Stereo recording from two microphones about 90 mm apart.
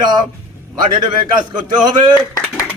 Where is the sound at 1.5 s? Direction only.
55° right (ahead or behind).